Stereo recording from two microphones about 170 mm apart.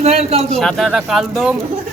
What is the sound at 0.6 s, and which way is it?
Speech, centre (ahead or behind).